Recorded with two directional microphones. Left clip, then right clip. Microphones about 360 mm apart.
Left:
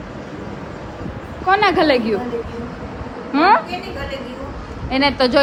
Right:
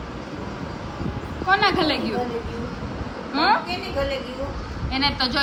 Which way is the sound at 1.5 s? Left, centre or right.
Centre.